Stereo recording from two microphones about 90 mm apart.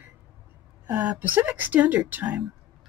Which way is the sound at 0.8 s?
15° right (ahead or behind).